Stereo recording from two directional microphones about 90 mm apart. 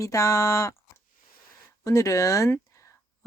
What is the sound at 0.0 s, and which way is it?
Speech, 40° left (ahead or behind).